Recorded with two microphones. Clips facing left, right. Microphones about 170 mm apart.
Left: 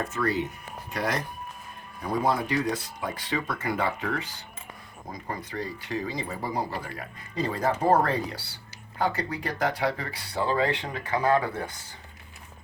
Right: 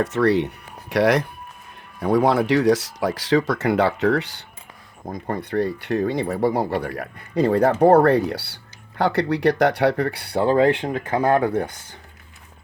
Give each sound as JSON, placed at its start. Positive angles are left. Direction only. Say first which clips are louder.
{"t": 0.0, "sound": "speech", "louder": "right 9 dB", "side_deg": -80}
{"t": 5.0, "sound": "speech", "louder": "right 8 dB", "side_deg": -50}